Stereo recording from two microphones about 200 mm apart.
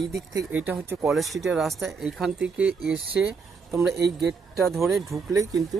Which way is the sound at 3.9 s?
55° right (ahead or behind).